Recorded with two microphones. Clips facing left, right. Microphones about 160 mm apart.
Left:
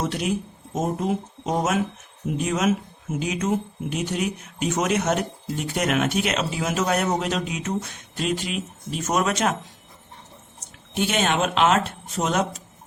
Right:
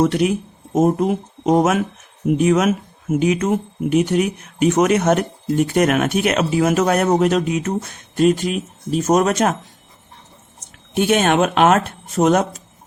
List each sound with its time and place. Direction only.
0.0 s speech: 60° right (ahead or behind)
10.9 s speech: 50° right (ahead or behind)